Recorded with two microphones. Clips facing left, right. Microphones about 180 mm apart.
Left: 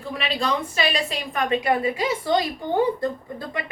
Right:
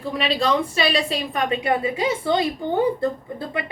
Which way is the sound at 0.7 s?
35° right (ahead or behind).